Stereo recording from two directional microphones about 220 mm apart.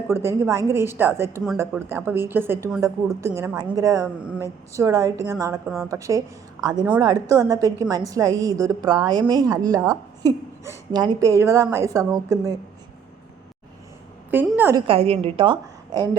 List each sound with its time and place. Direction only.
0.1 s a woman's voice: 10° right (ahead or behind)
14.3 s a woman's voice: 10° right (ahead or behind)
14.8 s a woman's voice: 25° right (ahead or behind)